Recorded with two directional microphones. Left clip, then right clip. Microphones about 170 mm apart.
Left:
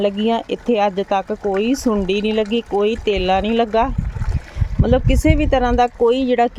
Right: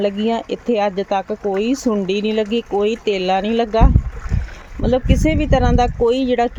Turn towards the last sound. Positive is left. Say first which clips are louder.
# left 1 dB
turn(degrees=0)  # may be behind; listen again after turning